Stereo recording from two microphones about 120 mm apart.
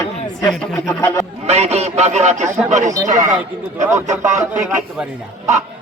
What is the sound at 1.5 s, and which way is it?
Speech, 65° right (ahead or behind).